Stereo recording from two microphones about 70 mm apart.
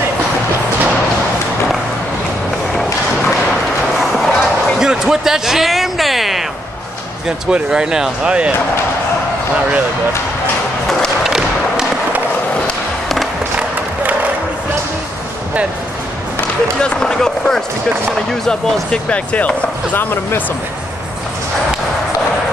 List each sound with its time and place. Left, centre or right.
4.0 s a sound: centre
4.7 s speech: centre
7.2 s speech: centre
11.2 s thump: centre
12.6 s skateboard: centre
16.8 s speech: centre; by 20.4 s left